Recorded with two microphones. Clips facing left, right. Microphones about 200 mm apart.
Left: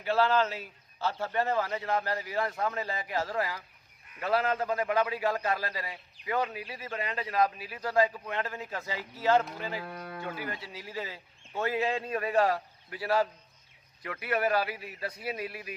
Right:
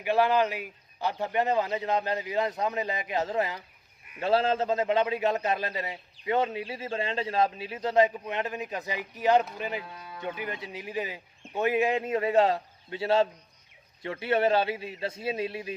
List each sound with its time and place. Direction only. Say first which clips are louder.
0.0 s a man's voice: right 2 dB; 15° right (ahead or behind)
9.8 s livestock: left 4 dB; 60° left (ahead or behind)
10.2 s a man's voice: right 5 dB; 20° right (ahead or behind)